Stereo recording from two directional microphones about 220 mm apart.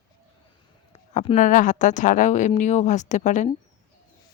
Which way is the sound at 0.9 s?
25° left (ahead or behind).